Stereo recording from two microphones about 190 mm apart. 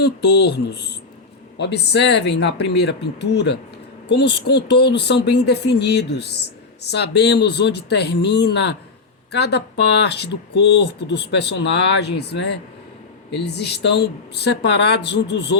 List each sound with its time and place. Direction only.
0.0 s speech: 60° left (ahead or behind)